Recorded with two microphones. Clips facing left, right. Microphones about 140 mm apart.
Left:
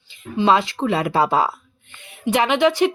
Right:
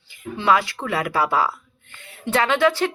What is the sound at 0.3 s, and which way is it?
Speech, 20° left (ahead or behind).